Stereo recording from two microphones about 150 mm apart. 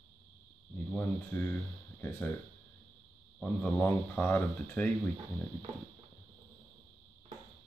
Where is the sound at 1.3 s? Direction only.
15° left (ahead or behind).